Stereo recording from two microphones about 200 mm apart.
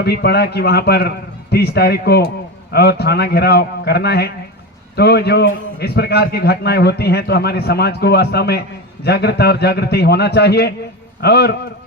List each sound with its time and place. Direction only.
0.0 s a man's voice: 55° left (ahead or behind)